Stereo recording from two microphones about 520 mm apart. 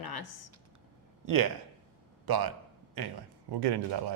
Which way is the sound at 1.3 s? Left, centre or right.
Right.